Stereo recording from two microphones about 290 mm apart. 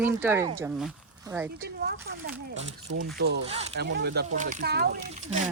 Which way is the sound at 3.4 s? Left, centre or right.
Centre.